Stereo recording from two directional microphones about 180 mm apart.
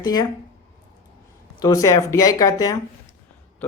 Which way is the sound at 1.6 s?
20° left (ahead or behind).